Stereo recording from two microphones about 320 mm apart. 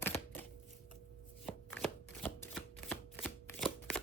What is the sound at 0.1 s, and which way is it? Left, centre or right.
Typewriter, centre.